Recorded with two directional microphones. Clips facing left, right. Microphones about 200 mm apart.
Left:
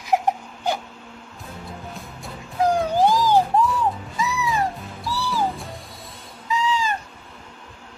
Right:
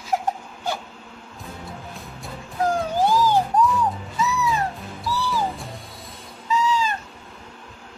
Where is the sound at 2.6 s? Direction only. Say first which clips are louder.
Left 3 dB; 15° left (ahead or behind).